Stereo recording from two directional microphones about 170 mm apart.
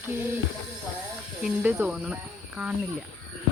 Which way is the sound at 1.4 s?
5° right (ahead or behind).